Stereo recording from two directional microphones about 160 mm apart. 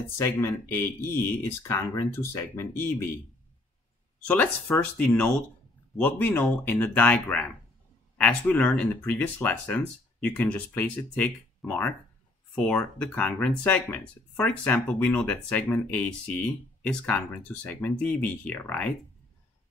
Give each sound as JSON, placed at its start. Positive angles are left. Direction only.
{"t": 0.2, "sound": "speech", "side_deg": 15}
{"t": 4.3, "sound": "speech", "side_deg": 10}